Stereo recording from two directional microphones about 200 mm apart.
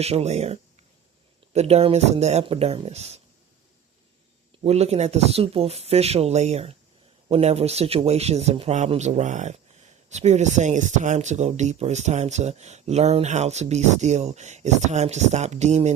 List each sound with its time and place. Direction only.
0.0 s speech: 30° right (ahead or behind)
4.6 s speech: 30° right (ahead or behind)